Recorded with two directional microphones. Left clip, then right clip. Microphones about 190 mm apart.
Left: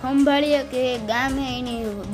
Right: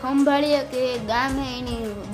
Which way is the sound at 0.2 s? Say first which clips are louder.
Left 1 dB; 10° left (ahead or behind).